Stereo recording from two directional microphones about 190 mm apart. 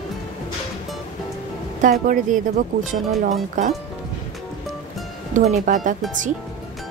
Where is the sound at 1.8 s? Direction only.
45° right (ahead or behind).